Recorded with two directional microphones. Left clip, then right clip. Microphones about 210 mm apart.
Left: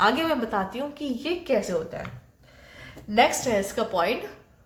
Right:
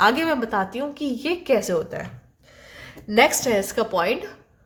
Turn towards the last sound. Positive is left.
turn(degrees=-25)  # may be behind; listen again after turning